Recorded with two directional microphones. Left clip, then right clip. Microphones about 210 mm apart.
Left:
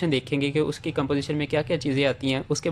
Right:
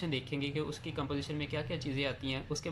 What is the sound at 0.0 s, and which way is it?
Speech, 40° left (ahead or behind).